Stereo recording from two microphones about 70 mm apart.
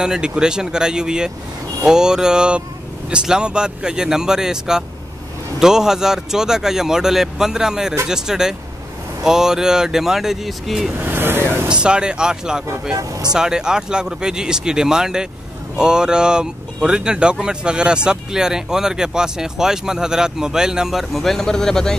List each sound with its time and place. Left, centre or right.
0.0 s speech: centre
11.0 s speech: right
11.6 s speech: centre
12.9 s speech: right
13.3 s speech: centre